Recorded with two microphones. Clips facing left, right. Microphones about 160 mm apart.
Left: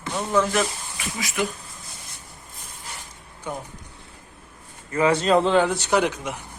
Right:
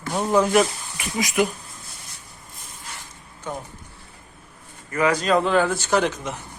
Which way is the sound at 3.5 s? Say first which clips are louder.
Even; 10° left (ahead or behind).